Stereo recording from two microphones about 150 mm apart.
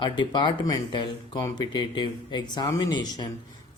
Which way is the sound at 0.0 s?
30° left (ahead or behind).